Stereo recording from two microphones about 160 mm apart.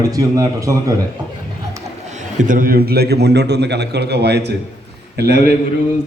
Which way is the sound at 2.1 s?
55° right (ahead or behind).